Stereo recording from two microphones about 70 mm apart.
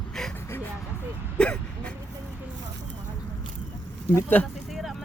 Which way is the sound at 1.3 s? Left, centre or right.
Centre.